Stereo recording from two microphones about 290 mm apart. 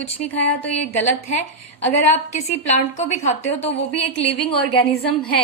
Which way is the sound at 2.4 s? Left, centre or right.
Left.